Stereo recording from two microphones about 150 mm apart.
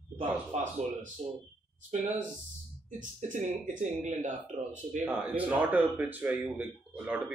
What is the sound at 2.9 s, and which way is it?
Speech, 55° right (ahead or behind).